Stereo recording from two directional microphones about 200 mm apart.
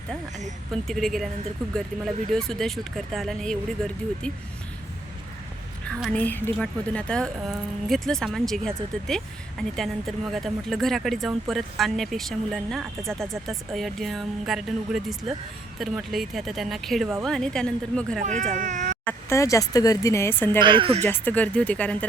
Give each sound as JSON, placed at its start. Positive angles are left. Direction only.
{"t": 0.7, "sound": "a woman's voice", "side_deg": 0}
{"t": 2.3, "sound": "a woman's voice", "side_deg": 0}
{"t": 5.9, "sound": "a woman's voice", "side_deg": 5}
{"t": 18.2, "sound": "speech", "side_deg": -40}
{"t": 19.0, "sound": "speech", "side_deg": 15}
{"t": 20.6, "sound": "speech", "side_deg": -25}
{"t": 21.0, "sound": "speech", "side_deg": 10}